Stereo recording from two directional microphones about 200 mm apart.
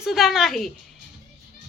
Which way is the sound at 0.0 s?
Centre (ahead or behind).